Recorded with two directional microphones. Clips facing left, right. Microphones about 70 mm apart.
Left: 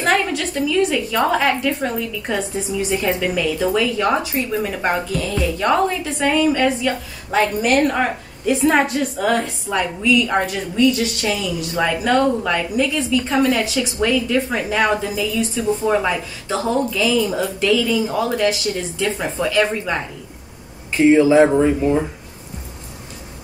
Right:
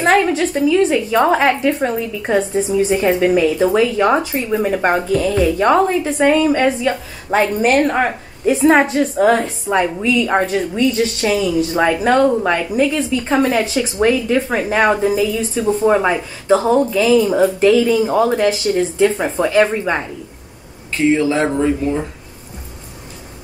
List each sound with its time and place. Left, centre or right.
0.0 s a woman's voice: right
5.0 s a woman's voice: right
5.6 s a woman's voice: right
20.9 s speech: centre